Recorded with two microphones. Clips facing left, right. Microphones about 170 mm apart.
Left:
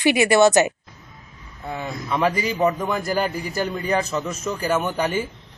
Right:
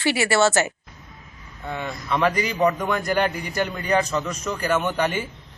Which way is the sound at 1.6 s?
5° left (ahead or behind).